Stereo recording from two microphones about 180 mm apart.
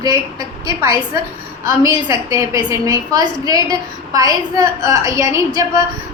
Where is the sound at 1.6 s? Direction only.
20° right (ahead or behind).